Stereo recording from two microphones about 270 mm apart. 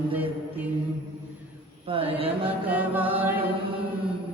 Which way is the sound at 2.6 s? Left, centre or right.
Centre.